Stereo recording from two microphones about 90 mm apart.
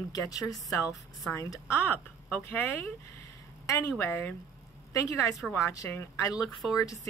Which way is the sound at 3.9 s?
20° left (ahead or behind).